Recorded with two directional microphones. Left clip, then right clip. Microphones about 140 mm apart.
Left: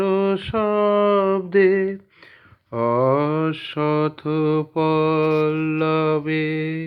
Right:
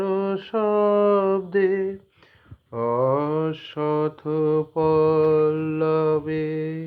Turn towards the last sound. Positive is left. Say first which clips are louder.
# left 3 dB
turn(degrees=25)  # may be behind; listen again after turning